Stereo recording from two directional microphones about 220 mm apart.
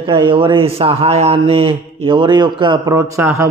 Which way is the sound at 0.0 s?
20° right (ahead or behind).